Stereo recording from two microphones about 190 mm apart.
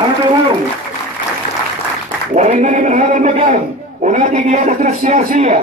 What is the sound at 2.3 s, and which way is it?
A man's voice, 40° right (ahead or behind).